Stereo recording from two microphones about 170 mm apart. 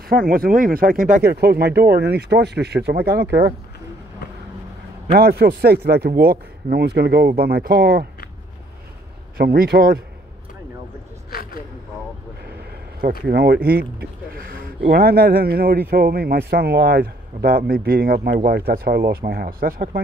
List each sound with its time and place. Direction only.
0.1 s speech: 55° right (ahead or behind); by 3.5 s 75° right (ahead or behind)
5.1 s speech: 70° right (ahead or behind)
9.4 s a man's voice: 65° right (ahead or behind)
11.2 s a sound: 60° left (ahead or behind)
13.3 s a man's voice: 70° right (ahead or behind)